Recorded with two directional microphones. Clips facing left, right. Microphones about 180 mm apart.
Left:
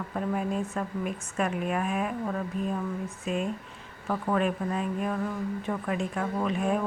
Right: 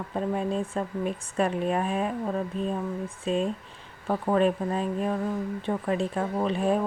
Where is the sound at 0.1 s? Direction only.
30° right (ahead or behind).